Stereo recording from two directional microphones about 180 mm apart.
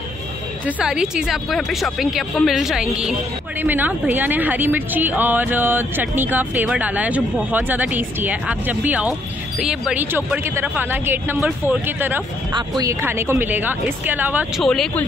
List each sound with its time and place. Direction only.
0.7 s a woman's voice: 5° right (ahead or behind)
12.5 s a woman's voice: 20° right (ahead or behind)
14.6 s speech: 5° left (ahead or behind)